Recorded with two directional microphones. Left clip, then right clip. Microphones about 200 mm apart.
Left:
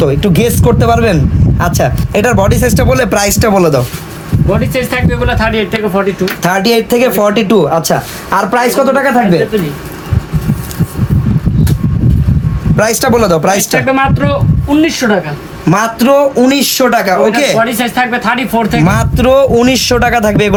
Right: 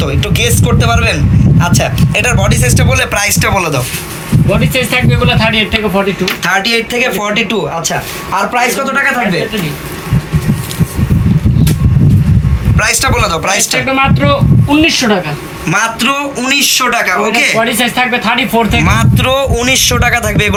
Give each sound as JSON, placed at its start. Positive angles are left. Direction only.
{"t": 0.0, "sound": "speech", "side_deg": 60}
{"t": 4.4, "sound": "speech", "side_deg": 10}
{"t": 6.4, "sound": "speech", "side_deg": 60}
{"t": 12.7, "sound": "speech", "side_deg": 55}
{"t": 13.8, "sound": "speech", "side_deg": 15}
{"t": 15.6, "sound": "speech", "side_deg": 55}
{"t": 17.6, "sound": "speech", "side_deg": 15}
{"t": 18.8, "sound": "speech", "side_deg": 45}